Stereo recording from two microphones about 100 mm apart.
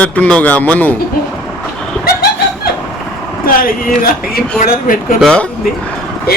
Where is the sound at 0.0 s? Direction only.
15° left (ahead or behind).